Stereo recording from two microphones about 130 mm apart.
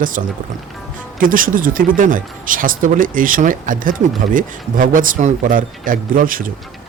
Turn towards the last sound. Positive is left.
turn(degrees=-90)